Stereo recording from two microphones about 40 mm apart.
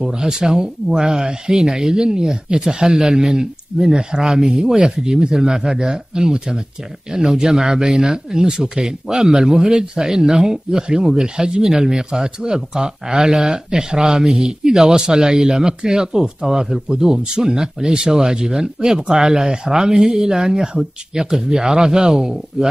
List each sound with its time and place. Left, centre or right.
0.0 s speech: centre
19.9 s speech: centre